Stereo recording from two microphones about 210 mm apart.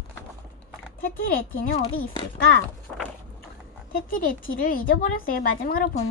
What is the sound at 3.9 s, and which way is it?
A woman's voice, 40° left (ahead or behind).